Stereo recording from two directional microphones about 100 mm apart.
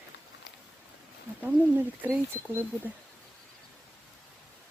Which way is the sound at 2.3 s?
25° right (ahead or behind).